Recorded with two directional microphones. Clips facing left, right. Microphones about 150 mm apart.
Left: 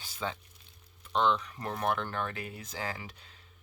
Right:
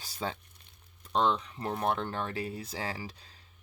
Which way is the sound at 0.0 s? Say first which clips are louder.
Right 1 dB; 35° right (ahead or behind).